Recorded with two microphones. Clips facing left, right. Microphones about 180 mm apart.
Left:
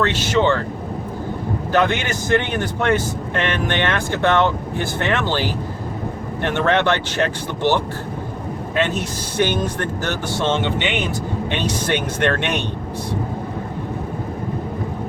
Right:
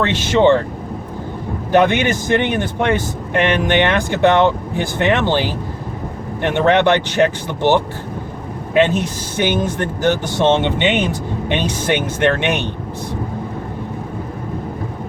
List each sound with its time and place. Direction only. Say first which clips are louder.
0.0 s speech: right 4 dB; 20° right (ahead or behind)
1.7 s speech: right 6 dB; 20° right (ahead or behind)
9.4 s speech: right 2 dB; 15° right (ahead or behind)